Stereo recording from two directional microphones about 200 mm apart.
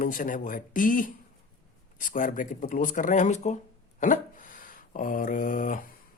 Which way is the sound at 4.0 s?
40° left (ahead or behind).